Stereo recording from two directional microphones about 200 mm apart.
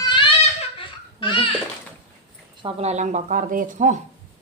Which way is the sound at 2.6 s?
35° right (ahead or behind).